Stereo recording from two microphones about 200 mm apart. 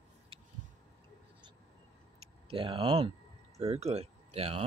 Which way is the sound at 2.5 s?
25° right (ahead or behind).